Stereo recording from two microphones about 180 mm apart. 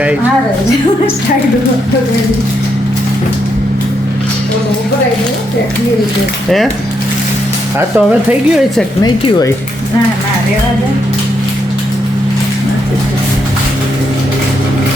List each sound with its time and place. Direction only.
7.9 s a woman's voice: 5° right (ahead or behind)
9.0 s speech: 20° left (ahead or behind)